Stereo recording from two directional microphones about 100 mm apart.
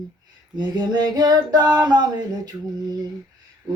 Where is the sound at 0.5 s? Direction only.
45° right (ahead or behind).